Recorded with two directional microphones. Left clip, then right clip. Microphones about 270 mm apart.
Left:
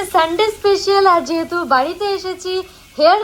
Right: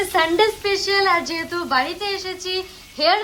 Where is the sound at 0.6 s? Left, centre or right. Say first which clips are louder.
Left 6 dB; centre.